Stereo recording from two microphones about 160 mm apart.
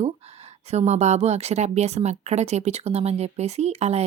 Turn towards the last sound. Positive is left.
turn(degrees=-40)  # may be behind; listen again after turning